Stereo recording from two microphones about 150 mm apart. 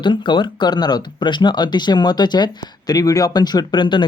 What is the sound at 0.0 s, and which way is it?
Speech, 30° left (ahead or behind).